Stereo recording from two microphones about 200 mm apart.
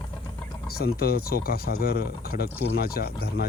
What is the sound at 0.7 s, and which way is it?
Speech, 50° left (ahead or behind).